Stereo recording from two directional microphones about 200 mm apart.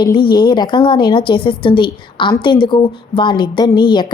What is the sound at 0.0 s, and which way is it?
A woman's voice, 20° left (ahead or behind).